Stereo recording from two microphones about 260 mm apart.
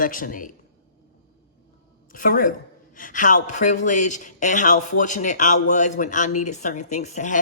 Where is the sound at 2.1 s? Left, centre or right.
Left.